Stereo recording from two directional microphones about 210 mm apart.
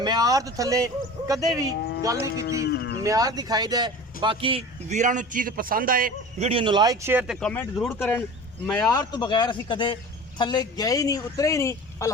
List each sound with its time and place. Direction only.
0.0 s speech: 20° right (ahead or behind)
2.0 s speech: 15° right (ahead or behind)
2.6 s livestock: 50° left (ahead or behind)
3.0 s speech: 15° right (ahead or behind); by 6.5 s 40° right (ahead or behind)
6.5 s speech: 25° right (ahead or behind)
7.3 s a man's voice: 5° left (ahead or behind)